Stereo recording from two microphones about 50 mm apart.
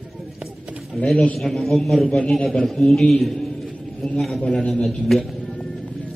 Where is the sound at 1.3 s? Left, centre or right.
Centre.